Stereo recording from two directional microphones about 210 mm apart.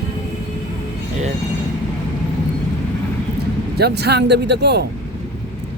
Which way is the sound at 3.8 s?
50° right (ahead or behind).